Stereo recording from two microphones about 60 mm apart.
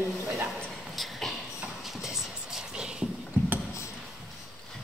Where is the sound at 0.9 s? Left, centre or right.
Centre.